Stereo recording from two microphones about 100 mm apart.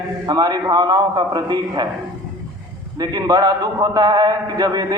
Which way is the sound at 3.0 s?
40° right (ahead or behind).